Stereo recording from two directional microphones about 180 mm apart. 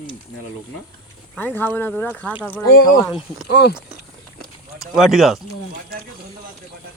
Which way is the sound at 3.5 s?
65° left (ahead or behind).